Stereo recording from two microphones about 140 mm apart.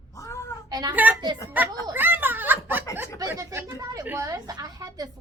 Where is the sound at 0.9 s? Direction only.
10° right (ahead or behind).